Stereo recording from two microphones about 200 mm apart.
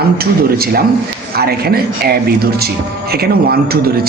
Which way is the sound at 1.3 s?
50° right (ahead or behind).